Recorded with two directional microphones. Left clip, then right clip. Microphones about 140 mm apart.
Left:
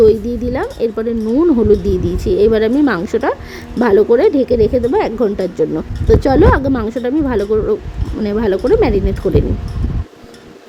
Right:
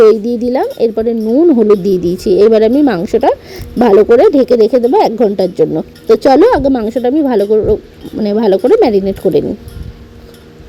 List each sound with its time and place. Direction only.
0.0 s speech: 30° right (ahead or behind)
1.3 s speech: 15° right (ahead or behind)
1.8 s speech: 30° right (ahead or behind)